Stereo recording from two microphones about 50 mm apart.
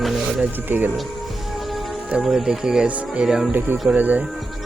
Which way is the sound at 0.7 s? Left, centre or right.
Right.